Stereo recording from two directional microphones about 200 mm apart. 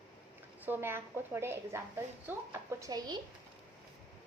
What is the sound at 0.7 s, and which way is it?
A woman's voice, 10° right (ahead or behind).